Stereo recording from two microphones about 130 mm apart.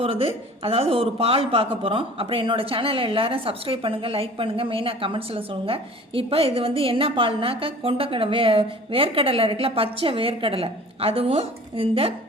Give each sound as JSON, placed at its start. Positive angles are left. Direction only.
{"t": 0.0, "sound": "speech", "side_deg": -45}